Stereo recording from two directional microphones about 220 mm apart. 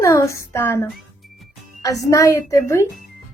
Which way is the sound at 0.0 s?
15° left (ahead or behind).